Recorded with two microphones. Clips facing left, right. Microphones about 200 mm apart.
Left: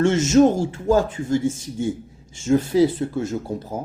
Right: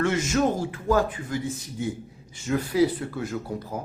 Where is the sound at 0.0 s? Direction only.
25° left (ahead or behind).